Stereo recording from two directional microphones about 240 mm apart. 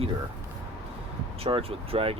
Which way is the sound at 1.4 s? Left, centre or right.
Right.